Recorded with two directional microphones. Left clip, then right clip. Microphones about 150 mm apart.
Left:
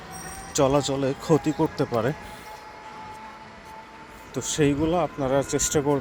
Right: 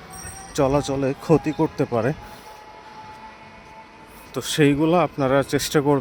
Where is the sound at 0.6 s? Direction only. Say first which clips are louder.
Right 1 dB; 25° right (ahead or behind).